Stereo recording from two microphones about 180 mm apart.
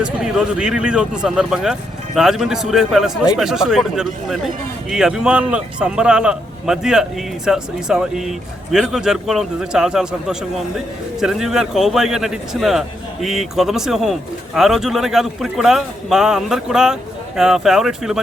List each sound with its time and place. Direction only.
0.0 s speech: 5° right (ahead or behind)